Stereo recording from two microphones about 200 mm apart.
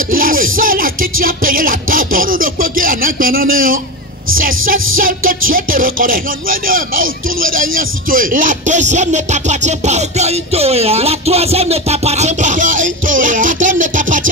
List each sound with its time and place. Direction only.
0.1 s music: 45° right (ahead or behind)
4.9 s music: 45° right (ahead or behind)
5.5 s speech: 45° right (ahead or behind)